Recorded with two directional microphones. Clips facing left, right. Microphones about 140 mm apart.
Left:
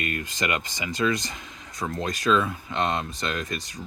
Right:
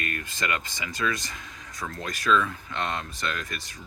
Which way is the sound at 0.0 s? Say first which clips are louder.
Left 3 dB; 25° left (ahead or behind).